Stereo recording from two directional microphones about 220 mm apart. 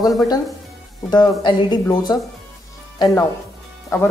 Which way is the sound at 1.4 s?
20° left (ahead or behind).